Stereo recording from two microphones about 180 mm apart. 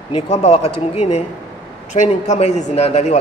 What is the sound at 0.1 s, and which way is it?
Speech, 35° left (ahead or behind).